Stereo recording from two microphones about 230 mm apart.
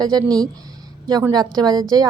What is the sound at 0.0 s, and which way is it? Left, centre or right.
Speech, centre.